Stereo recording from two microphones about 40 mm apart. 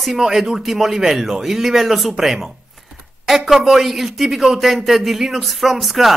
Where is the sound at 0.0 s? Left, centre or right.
Centre.